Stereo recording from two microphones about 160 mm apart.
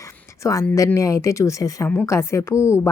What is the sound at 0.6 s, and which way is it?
A woman's voice, 10° left (ahead or behind).